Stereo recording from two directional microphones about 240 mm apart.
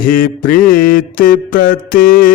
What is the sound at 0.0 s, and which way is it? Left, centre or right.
Mantra, left.